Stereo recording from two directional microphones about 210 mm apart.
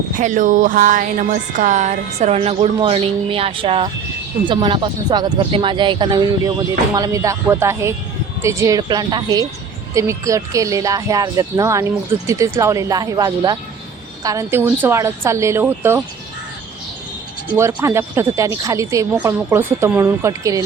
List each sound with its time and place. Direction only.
0.2 s speech: 35° right (ahead or behind); by 16.0 s 10° right (ahead or behind)
17.5 s speech: 10° right (ahead or behind)